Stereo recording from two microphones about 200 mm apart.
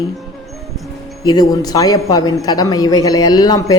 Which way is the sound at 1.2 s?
20° left (ahead or behind).